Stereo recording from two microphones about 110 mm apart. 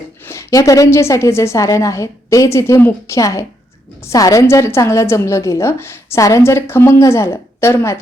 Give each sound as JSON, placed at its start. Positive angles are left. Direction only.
{"t": 0.3, "sound": "a woman's voice", "side_deg": 30}